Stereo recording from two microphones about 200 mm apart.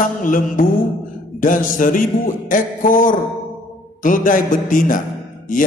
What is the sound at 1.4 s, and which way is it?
A man's voice, 40° left (ahead or behind).